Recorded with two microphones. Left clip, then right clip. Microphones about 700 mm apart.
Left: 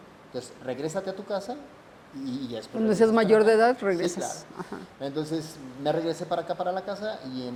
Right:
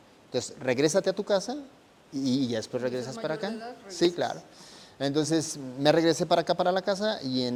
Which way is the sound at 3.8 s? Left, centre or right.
Left.